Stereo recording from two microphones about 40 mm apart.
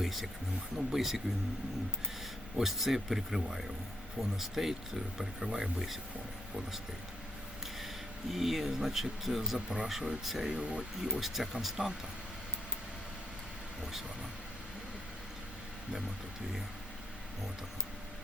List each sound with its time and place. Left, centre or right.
0.0 s speech: centre
2.6 s speech: centre
8.3 s speech: centre
9.6 s speech: centre
10.6 s speech: right
11.2 s speech: centre